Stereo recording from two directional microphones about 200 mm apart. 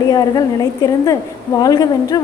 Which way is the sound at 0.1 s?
20° left (ahead or behind).